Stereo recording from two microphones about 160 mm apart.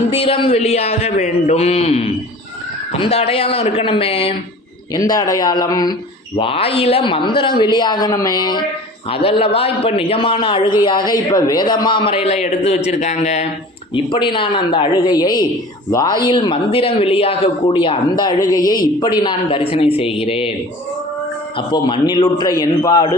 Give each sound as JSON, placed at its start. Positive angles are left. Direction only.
{"t": 0.1, "sound": "a man's voice", "side_deg": 35}
{"t": 4.9, "sound": "speech", "side_deg": 25}
{"t": 6.3, "sound": "a man's voice", "side_deg": 35}
{"t": 13.9, "sound": "a man's voice", "side_deg": 30}
{"t": 21.7, "sound": "speech", "side_deg": 30}